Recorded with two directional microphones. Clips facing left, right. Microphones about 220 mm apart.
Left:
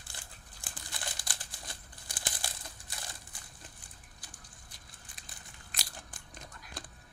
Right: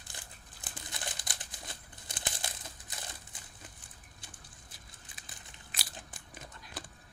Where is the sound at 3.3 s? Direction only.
20° right (ahead or behind).